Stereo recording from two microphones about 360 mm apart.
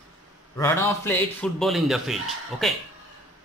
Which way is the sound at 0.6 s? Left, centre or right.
Centre.